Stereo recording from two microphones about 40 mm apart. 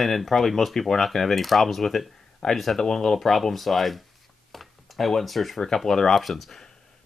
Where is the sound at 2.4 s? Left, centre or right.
Centre.